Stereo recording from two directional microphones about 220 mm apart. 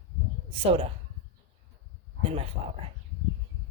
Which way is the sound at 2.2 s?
25° right (ahead or behind).